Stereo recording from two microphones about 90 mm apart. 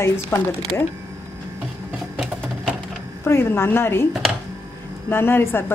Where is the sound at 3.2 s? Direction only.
30° left (ahead or behind).